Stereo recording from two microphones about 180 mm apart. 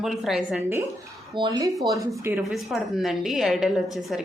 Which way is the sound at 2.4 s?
Centre (ahead or behind).